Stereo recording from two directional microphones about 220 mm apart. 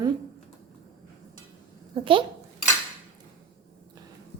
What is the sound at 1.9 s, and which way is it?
Speech, 25° right (ahead or behind).